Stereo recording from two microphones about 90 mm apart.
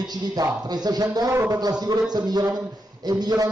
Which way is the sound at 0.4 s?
50° right (ahead or behind).